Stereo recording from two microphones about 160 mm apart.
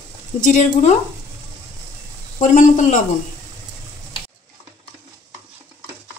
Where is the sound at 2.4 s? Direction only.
50° left (ahead or behind).